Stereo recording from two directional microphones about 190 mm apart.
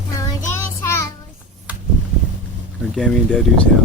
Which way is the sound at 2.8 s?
5° left (ahead or behind).